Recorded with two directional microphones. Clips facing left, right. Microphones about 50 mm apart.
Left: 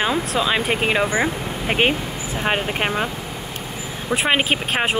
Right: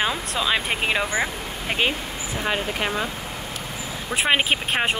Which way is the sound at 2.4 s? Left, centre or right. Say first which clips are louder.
Left 4 dB; left.